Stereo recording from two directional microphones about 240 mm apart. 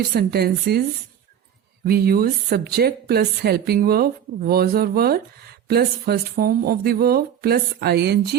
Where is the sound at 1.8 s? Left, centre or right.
Right.